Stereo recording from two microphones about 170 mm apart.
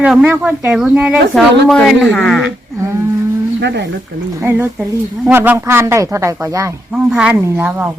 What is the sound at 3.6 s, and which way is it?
Speech, 80° right.